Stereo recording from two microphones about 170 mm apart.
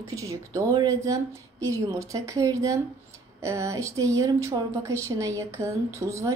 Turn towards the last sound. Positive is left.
turn(degrees=-15)  # may be behind; listen again after turning